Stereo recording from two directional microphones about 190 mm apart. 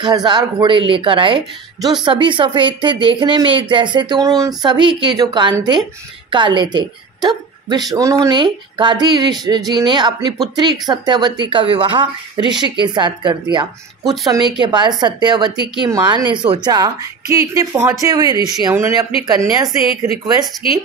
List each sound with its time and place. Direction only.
0.0 s a woman's voice: 25° right (ahead or behind)